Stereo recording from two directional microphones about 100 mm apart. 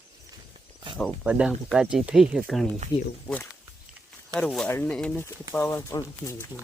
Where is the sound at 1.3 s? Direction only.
10° right (ahead or behind).